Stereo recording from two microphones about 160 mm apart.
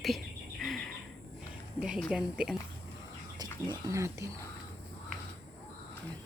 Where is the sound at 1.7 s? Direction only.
5° right (ahead or behind).